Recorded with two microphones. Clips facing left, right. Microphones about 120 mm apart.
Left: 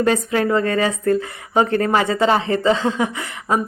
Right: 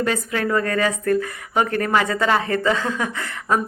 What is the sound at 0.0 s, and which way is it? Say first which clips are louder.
A woman's voice: left 5 dB; 30° left (ahead or behind).